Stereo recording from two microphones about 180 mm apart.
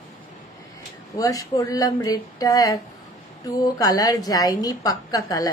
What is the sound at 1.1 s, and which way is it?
A woman's voice, 20° left (ahead or behind).